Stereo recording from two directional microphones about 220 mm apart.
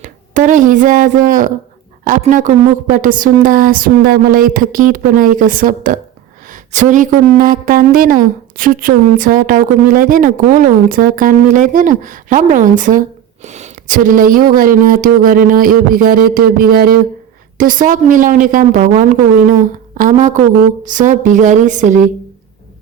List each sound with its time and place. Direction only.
0.0 s a woman's voice: 35° right (ahead or behind)